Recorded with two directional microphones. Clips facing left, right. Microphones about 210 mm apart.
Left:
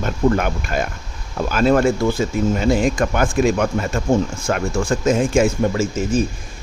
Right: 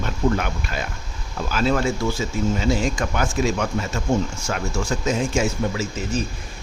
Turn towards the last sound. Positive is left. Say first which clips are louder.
# left 6 dB
turn(degrees=50)  # may be behind; listen again after turning